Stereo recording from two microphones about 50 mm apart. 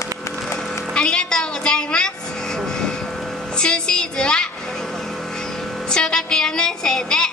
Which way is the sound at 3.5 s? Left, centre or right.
Centre.